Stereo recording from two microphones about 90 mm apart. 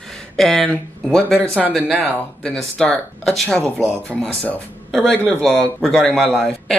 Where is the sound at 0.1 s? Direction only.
5° left (ahead or behind).